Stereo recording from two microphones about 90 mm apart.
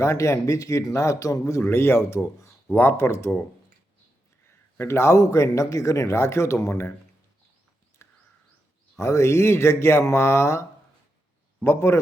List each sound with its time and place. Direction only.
0.0 s speech: 30° left (ahead or behind)
1.6 s speech: 25° left (ahead or behind)
4.8 s speech: 30° left (ahead or behind)
8.0 s a sound: 25° left (ahead or behind)
9.0 s speech: 35° left (ahead or behind)